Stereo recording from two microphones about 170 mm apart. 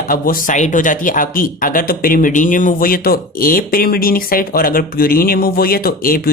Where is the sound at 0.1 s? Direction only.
55° left (ahead or behind).